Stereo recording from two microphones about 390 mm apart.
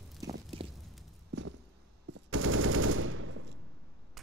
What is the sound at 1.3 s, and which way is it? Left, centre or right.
Walk, right.